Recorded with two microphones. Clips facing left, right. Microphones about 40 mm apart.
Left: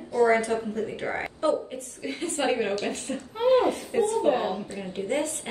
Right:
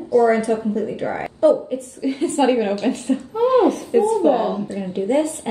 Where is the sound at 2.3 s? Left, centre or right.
Right.